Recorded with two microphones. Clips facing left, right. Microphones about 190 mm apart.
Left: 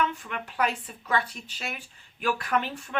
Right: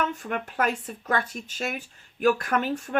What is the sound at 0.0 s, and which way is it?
Speech, 45° right (ahead or behind).